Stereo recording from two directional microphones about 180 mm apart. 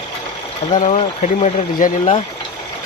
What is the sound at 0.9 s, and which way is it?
Speech, 35° left (ahead or behind).